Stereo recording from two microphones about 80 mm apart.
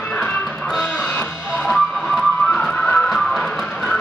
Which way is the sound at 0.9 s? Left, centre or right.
Centre.